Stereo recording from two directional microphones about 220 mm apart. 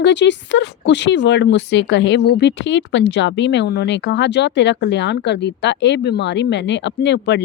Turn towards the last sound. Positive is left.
turn(degrees=50)  # may be behind; listen again after turning